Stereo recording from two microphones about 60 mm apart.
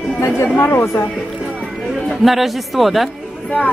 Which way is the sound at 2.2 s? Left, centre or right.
Centre.